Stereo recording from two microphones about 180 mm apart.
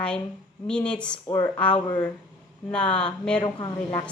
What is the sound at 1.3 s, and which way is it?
Speech, 20° left (ahead or behind).